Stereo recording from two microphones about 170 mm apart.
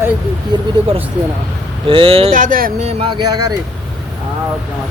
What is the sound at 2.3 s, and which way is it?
Speech, 50° right (ahead or behind).